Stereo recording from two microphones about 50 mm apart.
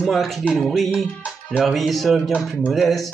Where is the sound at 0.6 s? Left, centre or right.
Centre.